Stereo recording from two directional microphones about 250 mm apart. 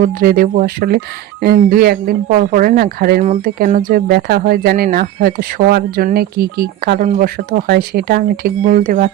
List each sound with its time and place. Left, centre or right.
0.0 s speech: right